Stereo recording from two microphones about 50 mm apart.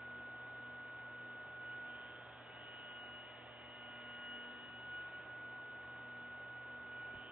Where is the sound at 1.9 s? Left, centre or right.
Centre.